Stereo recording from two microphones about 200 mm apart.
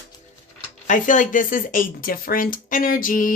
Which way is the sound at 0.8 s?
40° left (ahead or behind).